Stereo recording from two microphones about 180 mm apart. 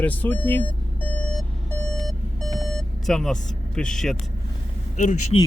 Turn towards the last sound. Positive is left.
turn(degrees=45)  # may be behind; listen again after turning